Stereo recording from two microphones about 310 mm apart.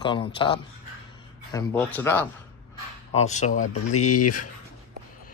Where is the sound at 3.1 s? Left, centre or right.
Left.